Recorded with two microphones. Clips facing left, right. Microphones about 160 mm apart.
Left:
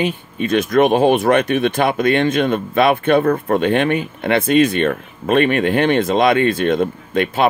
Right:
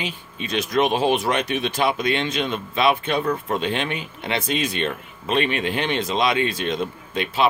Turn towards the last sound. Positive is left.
turn(degrees=55)  # may be behind; listen again after turning